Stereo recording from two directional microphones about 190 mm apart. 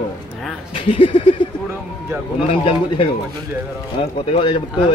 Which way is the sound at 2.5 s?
30° left (ahead or behind).